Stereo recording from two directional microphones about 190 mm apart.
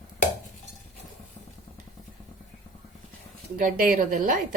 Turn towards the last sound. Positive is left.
turn(degrees=-45)  # may be behind; listen again after turning